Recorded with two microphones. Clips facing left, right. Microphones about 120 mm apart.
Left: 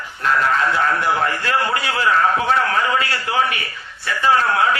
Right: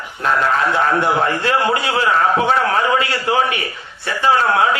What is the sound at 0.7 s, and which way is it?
A man's voice, 25° right (ahead or behind).